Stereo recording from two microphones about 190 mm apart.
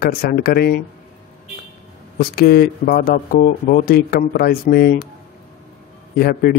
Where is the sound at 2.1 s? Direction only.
55° left (ahead or behind).